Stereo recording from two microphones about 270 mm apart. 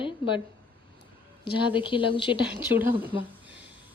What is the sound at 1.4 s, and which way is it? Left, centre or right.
Speech, centre.